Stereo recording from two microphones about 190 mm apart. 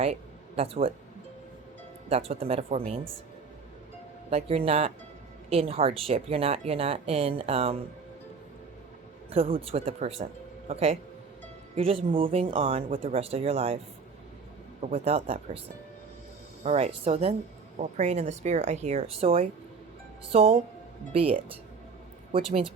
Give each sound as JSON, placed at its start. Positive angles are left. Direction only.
{"t": 0.0, "sound": "speech", "side_deg": -30}
{"t": 2.0, "sound": "speech", "side_deg": -30}
{"t": 4.3, "sound": "speech", "side_deg": -30}
{"t": 9.3, "sound": "speech", "side_deg": -30}
{"t": 14.8, "sound": "speech", "side_deg": -35}
{"t": 16.6, "sound": "speech", "side_deg": -35}